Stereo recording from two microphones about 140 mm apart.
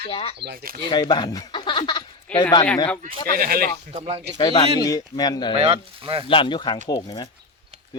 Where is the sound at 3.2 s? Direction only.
90° right.